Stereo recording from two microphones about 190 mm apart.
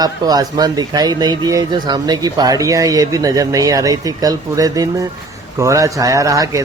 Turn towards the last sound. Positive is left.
turn(degrees=-15)  # may be behind; listen again after turning